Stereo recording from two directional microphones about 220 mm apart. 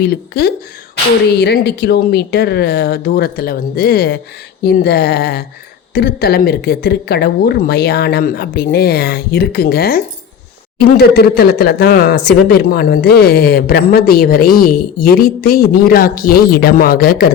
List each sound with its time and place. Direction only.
0.0 s speech: 45° left (ahead or behind)